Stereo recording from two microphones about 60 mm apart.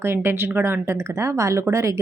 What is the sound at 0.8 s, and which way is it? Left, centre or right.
Speech, right.